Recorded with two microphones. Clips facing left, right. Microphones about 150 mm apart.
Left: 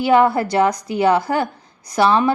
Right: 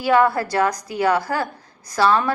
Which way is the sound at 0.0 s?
25° left (ahead or behind).